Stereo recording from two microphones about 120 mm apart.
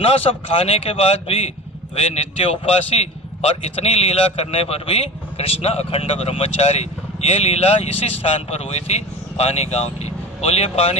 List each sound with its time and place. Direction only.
0.0 s speech: 55° left (ahead or behind)